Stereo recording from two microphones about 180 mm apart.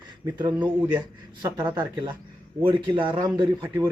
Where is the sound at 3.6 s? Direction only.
15° right (ahead or behind).